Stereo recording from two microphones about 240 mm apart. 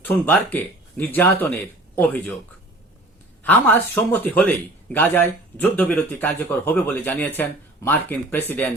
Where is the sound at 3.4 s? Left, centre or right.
Centre.